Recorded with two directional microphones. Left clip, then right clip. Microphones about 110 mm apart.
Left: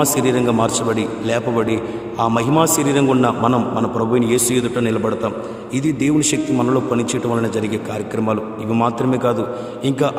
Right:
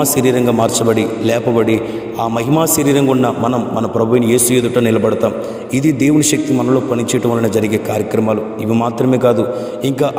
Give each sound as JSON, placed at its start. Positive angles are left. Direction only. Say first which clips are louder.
{"t": 0.0, "sound": "a man's voice", "louder": "right 3 dB", "side_deg": -45}